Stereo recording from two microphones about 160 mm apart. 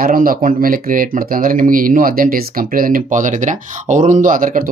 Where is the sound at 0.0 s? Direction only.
60° right (ahead or behind).